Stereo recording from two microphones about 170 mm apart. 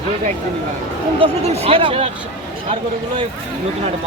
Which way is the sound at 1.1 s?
35° right (ahead or behind).